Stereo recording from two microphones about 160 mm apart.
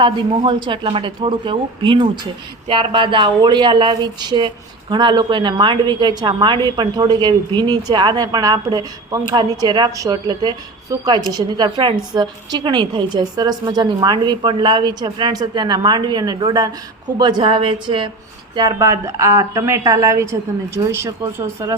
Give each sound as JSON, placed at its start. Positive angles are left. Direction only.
{"t": 0.0, "sound": "speech", "side_deg": -30}